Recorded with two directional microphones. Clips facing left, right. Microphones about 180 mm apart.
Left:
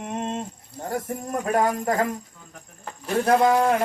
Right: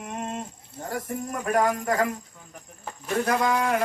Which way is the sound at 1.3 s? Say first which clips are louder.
Left 1 dB; 25° left (ahead or behind).